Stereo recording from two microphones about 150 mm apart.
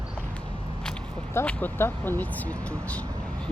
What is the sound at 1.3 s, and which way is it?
Speech, 10° left (ahead or behind).